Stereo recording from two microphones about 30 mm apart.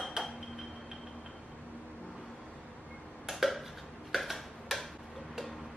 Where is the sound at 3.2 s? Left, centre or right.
Centre.